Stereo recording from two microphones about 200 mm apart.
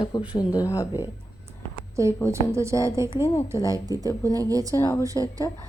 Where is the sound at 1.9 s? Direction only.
15° right (ahead or behind).